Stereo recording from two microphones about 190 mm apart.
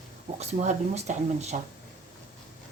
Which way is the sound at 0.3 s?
35° right (ahead or behind).